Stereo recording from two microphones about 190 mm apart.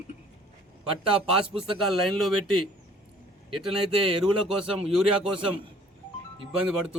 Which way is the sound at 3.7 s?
30° right (ahead or behind).